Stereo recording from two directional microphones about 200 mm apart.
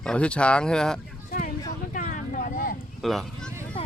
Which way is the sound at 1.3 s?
45° left (ahead or behind).